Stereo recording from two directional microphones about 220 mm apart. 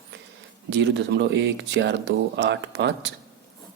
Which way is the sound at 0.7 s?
55° right (ahead or behind).